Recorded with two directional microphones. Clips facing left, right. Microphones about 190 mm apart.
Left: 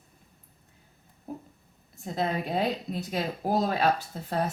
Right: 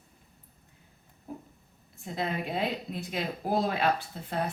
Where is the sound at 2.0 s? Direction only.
40° left (ahead or behind).